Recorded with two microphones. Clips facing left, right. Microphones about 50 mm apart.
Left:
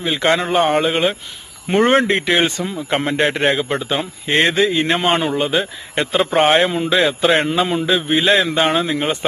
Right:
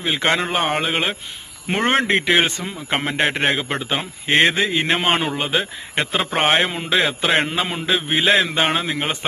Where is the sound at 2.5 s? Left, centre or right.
Right.